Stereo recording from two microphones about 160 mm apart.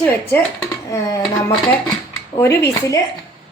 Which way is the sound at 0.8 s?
20° left (ahead or behind).